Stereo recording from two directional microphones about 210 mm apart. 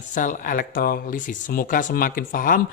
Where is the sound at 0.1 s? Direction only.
40° left (ahead or behind).